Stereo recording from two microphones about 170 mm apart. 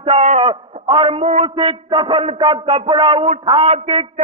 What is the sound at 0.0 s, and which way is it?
A man's voice, 40° right (ahead or behind).